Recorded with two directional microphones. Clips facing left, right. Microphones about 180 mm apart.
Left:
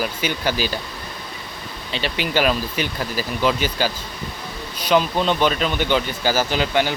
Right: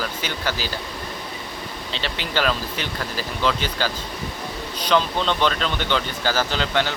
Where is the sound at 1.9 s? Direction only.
15° left (ahead or behind).